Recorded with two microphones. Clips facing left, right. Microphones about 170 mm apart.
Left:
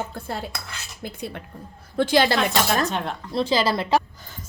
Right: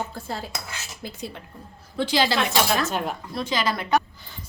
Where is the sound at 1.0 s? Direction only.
55° left (ahead or behind).